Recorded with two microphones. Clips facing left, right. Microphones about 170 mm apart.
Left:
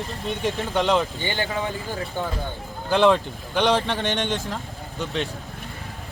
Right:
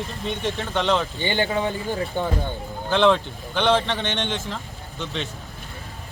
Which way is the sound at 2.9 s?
5° left (ahead or behind).